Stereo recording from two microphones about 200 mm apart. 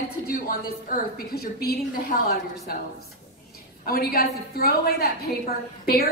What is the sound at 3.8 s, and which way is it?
A woman's voice, 50° left (ahead or behind).